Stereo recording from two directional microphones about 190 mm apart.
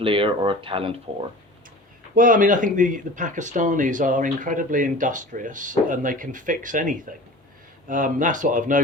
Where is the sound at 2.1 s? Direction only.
45° right (ahead or behind).